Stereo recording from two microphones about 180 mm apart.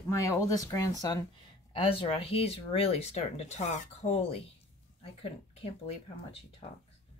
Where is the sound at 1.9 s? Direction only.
30° left (ahead or behind).